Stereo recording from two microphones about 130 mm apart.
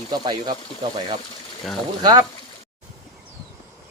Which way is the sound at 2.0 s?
30° right (ahead or behind).